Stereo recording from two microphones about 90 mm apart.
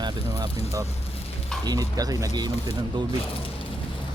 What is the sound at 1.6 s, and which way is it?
Speech, 45° right (ahead or behind).